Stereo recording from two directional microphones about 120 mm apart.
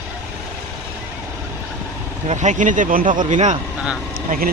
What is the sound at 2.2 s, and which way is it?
Speech, 85° right.